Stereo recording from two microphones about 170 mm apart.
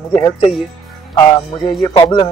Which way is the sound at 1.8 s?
25° left (ahead or behind).